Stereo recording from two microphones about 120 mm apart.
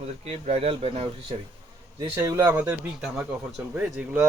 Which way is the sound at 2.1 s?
25° right (ahead or behind).